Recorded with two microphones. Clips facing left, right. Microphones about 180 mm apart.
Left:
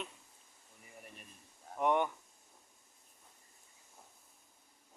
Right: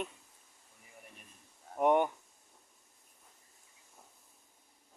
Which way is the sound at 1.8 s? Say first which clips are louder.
Right 4 dB; 45° right (ahead or behind).